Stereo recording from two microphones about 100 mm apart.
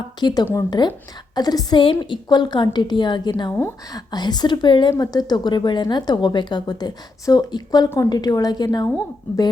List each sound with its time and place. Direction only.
0.2 s a woman's voice: 45° left (ahead or behind)
1.8 s a woman's voice: 60° left (ahead or behind)
4.9 s a woman's voice: 40° left (ahead or behind)